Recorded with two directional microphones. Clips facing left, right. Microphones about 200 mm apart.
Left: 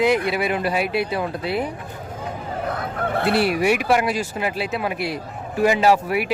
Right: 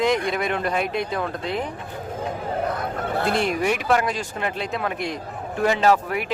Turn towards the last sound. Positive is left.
turn(degrees=10)  # may be behind; listen again after turning